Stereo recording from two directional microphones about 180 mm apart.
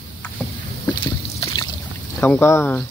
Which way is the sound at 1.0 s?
25° left (ahead or behind).